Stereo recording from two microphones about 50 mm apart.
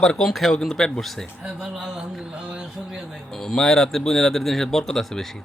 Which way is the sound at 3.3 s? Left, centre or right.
Centre.